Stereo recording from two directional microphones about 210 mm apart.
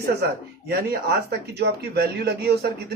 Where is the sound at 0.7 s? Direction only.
45° right (ahead or behind).